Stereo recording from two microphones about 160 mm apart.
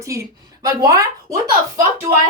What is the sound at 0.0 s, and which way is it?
A woman's voice, 20° right (ahead or behind).